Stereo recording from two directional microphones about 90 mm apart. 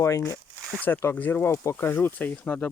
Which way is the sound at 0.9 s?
25° left (ahead or behind).